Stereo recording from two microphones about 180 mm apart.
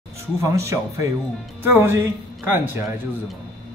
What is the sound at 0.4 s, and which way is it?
Speech, 15° right (ahead or behind).